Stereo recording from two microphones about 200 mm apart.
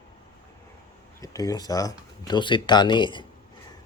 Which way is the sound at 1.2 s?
15° left (ahead or behind).